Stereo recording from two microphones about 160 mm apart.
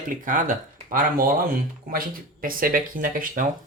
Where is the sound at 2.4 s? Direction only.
60° right (ahead or behind).